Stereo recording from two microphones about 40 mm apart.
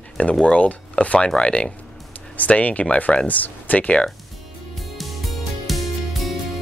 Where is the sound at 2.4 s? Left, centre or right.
Left.